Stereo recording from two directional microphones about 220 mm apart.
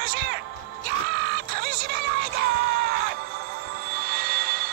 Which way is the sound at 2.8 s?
45° right (ahead or behind).